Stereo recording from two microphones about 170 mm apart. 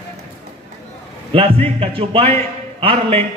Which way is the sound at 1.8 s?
35° right (ahead or behind).